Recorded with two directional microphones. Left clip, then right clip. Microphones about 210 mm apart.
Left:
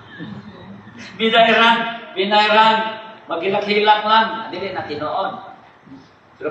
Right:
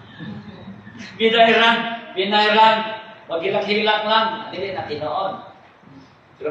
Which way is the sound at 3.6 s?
55° left (ahead or behind).